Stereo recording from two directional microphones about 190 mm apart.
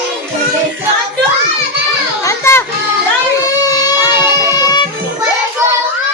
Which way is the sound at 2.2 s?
15° left (ahead or behind).